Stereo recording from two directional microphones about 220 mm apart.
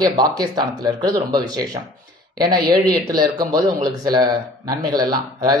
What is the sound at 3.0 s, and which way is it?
Speech, 15° right (ahead or behind).